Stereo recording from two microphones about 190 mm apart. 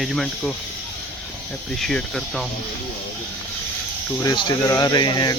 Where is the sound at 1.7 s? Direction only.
Centre (ahead or behind).